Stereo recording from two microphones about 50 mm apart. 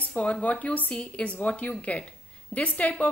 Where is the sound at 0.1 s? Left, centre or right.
Left.